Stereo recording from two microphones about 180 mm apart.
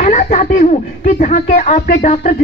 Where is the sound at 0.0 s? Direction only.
40° left (ahead or behind).